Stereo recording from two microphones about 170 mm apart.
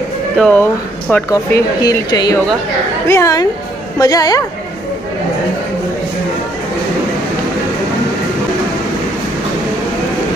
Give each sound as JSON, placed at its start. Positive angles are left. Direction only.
{"t": 0.4, "sound": "speech", "side_deg": 10}
{"t": 1.3, "sound": "speech", "side_deg": 20}